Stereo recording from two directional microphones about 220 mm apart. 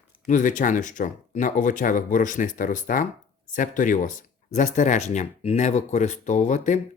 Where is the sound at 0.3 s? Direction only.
35° left (ahead or behind).